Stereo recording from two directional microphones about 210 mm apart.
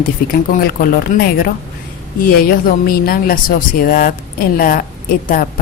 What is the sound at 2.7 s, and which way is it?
A woman's voice, 45° left (ahead or behind).